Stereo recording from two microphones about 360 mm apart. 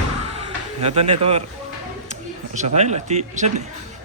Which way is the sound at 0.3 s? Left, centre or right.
Centre.